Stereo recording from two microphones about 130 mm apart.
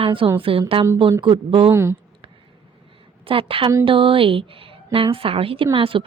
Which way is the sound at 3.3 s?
45° right (ahead or behind).